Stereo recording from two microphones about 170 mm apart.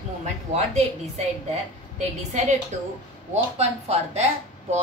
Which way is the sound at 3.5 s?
40° right (ahead or behind).